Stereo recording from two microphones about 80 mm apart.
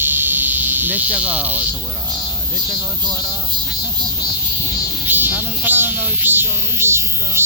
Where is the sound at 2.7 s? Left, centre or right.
Centre.